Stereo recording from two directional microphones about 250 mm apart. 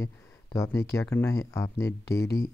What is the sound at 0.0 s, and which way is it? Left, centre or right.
Speech, centre.